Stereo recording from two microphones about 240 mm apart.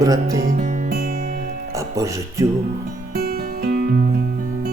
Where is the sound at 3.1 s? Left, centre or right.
Right.